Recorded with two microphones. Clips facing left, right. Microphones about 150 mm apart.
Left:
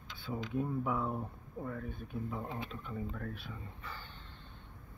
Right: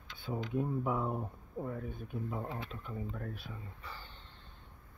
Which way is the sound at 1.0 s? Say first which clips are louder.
Right 1 dB; 15° right (ahead or behind).